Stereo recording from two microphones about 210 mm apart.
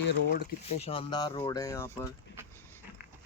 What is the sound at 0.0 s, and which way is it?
Speech, 55° left (ahead or behind).